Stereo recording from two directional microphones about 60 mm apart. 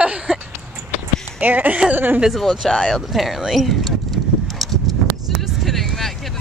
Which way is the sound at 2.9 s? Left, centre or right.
Centre.